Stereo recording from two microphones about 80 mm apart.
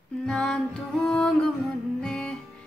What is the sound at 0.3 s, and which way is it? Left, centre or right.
Music, centre.